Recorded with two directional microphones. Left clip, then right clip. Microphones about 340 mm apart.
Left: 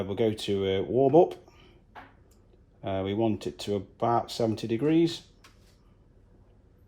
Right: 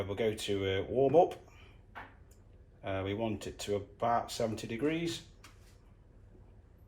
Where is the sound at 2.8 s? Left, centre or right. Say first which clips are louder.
Left 7 dB; left.